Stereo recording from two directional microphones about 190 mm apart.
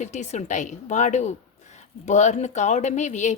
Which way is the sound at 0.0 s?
40° left (ahead or behind).